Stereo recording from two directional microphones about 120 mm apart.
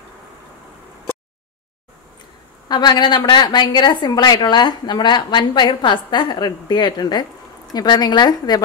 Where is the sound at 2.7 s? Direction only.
35° left (ahead or behind).